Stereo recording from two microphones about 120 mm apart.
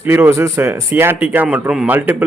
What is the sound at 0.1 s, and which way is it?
A man's voice, 20° right (ahead or behind).